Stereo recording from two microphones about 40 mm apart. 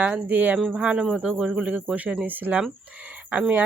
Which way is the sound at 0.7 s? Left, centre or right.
Right.